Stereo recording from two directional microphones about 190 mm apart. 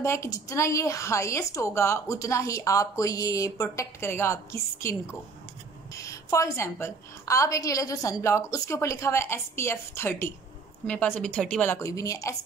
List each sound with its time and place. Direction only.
0.0 s a woman's voice: 15° left (ahead or behind)
5.9 s a woman's voice: 15° left (ahead or behind)